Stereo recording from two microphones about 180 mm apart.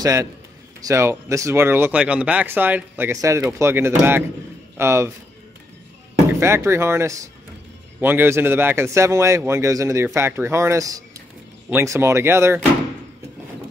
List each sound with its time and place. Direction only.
0.0 s speech: 15° right (ahead or behind)
6.4 s speech: 15° right (ahead or behind)